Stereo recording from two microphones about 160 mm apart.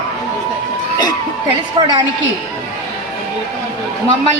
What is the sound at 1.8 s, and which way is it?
Speech, 30° right (ahead or behind).